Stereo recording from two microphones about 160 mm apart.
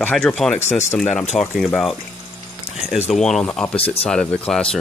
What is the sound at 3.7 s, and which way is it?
Speech, 40° left (ahead or behind).